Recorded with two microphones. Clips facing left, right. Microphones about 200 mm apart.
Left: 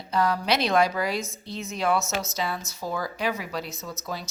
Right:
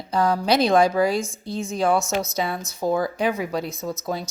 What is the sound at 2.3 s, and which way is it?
Speech, 55° right (ahead or behind).